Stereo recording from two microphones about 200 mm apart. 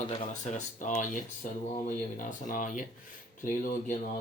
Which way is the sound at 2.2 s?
40° left (ahead or behind).